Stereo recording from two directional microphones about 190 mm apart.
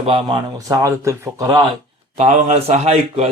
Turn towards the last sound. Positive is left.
turn(degrees=-35)  # may be behind; listen again after turning